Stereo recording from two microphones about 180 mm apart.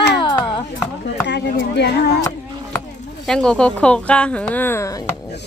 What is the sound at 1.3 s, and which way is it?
Speech, 70° left (ahead or behind).